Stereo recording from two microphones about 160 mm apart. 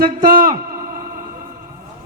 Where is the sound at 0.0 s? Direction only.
65° right (ahead or behind).